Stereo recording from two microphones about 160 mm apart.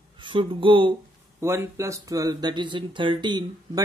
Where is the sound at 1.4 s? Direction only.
15° right (ahead or behind).